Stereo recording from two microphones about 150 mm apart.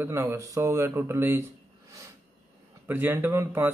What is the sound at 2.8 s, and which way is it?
Speech, 15° right (ahead or behind).